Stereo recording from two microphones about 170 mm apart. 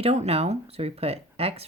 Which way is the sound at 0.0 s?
40° right (ahead or behind).